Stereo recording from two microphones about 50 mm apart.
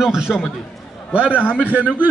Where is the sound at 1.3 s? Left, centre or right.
Left.